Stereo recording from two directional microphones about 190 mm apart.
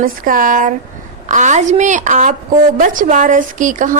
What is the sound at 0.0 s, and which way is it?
Speech, 45° right (ahead or behind).